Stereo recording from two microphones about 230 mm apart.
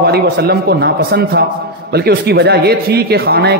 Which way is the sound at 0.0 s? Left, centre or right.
Right.